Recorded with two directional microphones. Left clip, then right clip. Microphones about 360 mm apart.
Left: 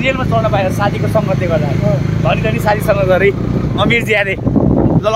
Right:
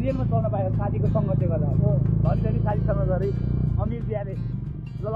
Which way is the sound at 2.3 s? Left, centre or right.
Left.